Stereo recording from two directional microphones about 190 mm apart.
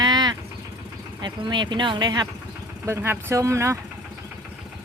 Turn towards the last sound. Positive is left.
turn(degrees=-15)  # may be behind; listen again after turning